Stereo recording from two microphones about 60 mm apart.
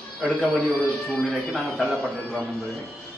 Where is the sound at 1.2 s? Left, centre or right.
Centre.